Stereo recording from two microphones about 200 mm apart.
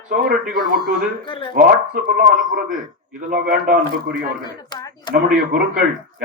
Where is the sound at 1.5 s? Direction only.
50° right (ahead or behind).